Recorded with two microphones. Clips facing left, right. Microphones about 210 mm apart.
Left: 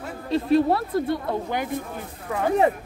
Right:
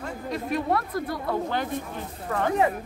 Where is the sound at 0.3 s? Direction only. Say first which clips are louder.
Left 7 dB; 30° left (ahead or behind).